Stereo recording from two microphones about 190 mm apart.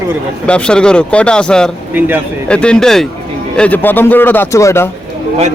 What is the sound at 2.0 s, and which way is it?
Speech, 10° right (ahead or behind).